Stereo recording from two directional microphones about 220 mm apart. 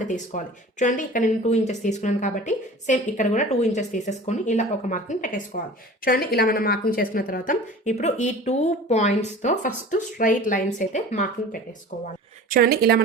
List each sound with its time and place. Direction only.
0.0 s speech: 35° left (ahead or behind)
12.5 s a woman's voice: 45° right (ahead or behind)